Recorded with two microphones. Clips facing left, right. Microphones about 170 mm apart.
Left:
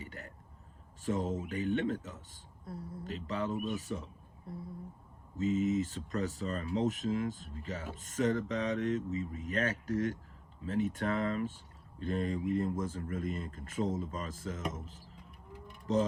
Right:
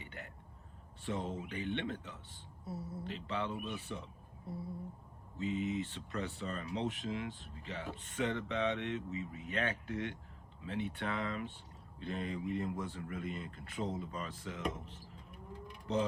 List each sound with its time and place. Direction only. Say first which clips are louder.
0.0 s a sound: left 3 dB; 40° left (ahead or behind)
1.0 s speech: left 5 dB; 40° left (ahead or behind)
5.4 s speech: left 6 dB; 40° left (ahead or behind)